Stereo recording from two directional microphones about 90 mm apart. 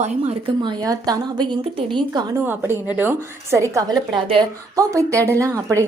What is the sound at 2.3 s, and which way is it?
A woman's voice, 25° right (ahead or behind).